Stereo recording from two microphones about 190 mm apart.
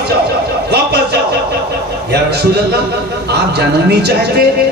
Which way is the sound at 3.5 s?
60° right (ahead or behind).